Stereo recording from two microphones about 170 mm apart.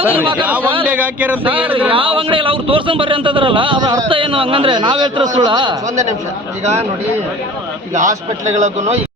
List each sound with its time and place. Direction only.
0.4 s speech: 10° right (ahead or behind)
1.9 s a man's voice: 30° right (ahead or behind)
8.5 s speech: 45° right (ahead or behind)